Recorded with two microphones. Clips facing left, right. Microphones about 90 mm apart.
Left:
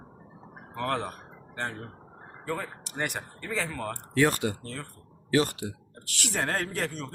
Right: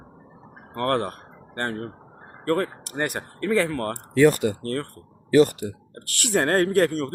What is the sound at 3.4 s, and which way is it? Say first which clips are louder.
Speech: right 10 dB; 65° right (ahead or behind).